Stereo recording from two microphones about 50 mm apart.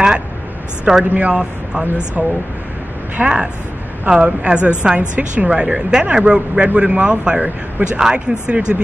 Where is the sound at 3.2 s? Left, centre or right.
Right.